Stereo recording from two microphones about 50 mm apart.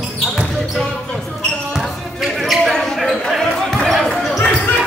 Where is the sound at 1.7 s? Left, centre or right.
Centre.